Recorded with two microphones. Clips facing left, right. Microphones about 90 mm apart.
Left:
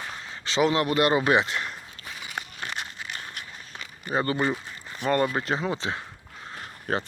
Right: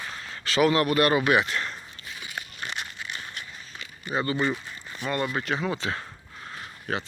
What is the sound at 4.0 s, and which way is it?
Speech, 45° left (ahead or behind).